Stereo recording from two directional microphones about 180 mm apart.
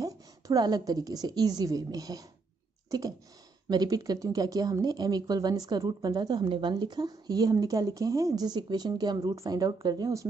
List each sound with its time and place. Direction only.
0.0 s a woman's voice: 20° right (ahead or behind)
2.9 s clicking: 20° right (ahead or behind)
3.6 s speech: 20° right (ahead or behind)